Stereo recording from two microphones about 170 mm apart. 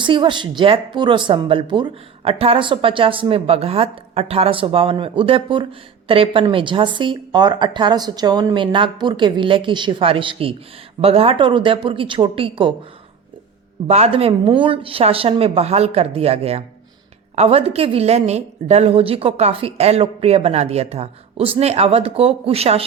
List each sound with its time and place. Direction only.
0.0 s a woman's voice: 30° right (ahead or behind)
13.8 s a woman's voice: 35° right (ahead or behind)